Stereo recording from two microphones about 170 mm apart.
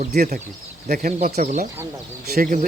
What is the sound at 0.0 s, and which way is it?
Speech, 60° right (ahead or behind).